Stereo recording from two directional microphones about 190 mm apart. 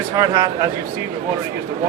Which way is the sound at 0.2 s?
15° right (ahead or behind).